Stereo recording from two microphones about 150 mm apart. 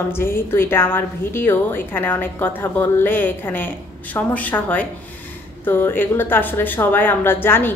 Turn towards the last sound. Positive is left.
turn(degrees=15)  # may be behind; listen again after turning